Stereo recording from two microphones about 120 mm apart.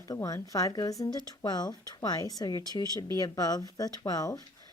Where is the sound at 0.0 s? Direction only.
25° left (ahead or behind).